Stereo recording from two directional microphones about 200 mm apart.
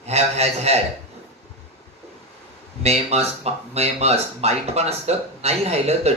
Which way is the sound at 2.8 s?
30° right (ahead or behind).